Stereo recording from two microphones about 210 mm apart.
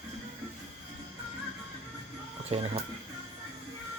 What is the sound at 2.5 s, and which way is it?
Speech, 25° right (ahead or behind).